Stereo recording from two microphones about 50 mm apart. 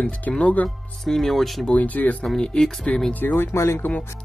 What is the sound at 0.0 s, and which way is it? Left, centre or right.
Speech, left.